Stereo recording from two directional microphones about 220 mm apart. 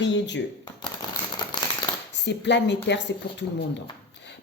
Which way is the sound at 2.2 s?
50° left (ahead or behind).